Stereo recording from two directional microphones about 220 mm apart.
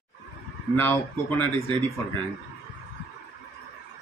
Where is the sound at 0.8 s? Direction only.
10° left (ahead or behind).